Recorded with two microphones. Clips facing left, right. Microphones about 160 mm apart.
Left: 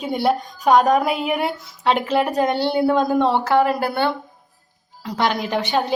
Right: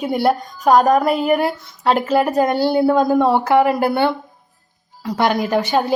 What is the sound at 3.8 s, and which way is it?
Speech, 55° right (ahead or behind).